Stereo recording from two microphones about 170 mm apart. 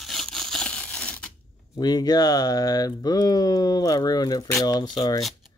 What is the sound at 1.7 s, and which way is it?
Speech, 25° left (ahead or behind).